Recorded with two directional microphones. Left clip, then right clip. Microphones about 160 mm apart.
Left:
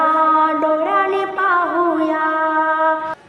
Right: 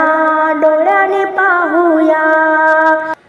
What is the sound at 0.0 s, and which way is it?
Music, 30° right (ahead or behind).